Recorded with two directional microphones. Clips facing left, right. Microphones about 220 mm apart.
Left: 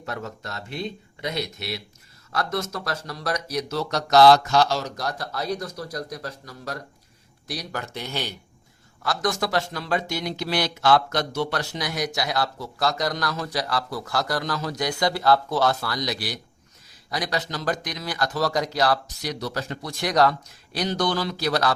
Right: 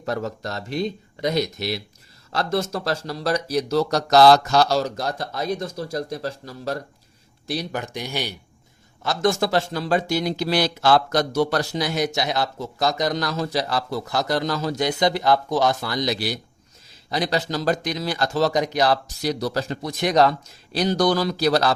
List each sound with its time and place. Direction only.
0.0 s speech: 35° right (ahead or behind)
2.3 s speech: 30° right (ahead or behind); by 8.4 s 10° right (ahead or behind)
9.0 s speech: 25° right (ahead or behind)
19.8 s speech: 20° right (ahead or behind)
20.7 s speech: 35° right (ahead or behind)